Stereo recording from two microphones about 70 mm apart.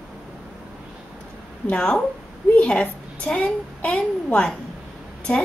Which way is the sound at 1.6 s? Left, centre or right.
Centre.